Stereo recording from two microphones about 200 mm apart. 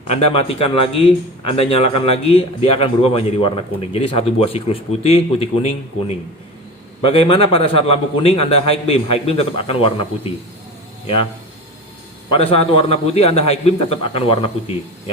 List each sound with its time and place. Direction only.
0.1 s a man's voice: 30° left (ahead or behind)
7.1 s a man's voice: 25° left (ahead or behind)
12.5 s a man's voice: 30° left (ahead or behind)